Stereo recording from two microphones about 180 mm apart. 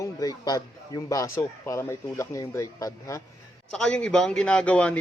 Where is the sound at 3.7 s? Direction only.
5° left (ahead or behind).